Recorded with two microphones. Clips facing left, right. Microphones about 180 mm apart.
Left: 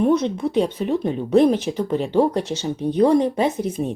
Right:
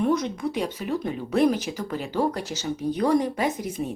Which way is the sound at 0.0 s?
25° left (ahead or behind).